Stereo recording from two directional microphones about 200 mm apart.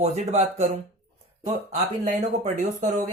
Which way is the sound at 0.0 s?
35° right (ahead or behind).